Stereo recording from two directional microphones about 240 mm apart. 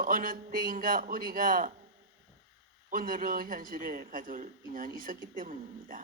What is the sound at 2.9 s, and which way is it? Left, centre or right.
A man's voice, right.